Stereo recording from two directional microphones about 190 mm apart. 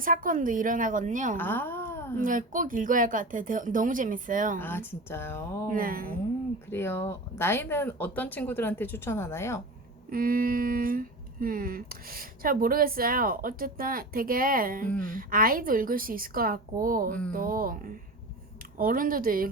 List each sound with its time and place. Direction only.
0.0 s speech: 45° right (ahead or behind)
1.4 s a woman's voice: 10° left (ahead or behind)
2.2 s speech: 45° right (ahead or behind)
4.6 s speech: 10° left (ahead or behind)
5.7 s speech: 50° right (ahead or behind)
6.7 s speech: 10° left (ahead or behind)
10.1 s speech: 50° right (ahead or behind)